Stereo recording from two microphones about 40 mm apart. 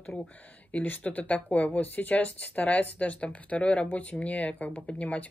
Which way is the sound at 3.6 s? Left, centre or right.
Left.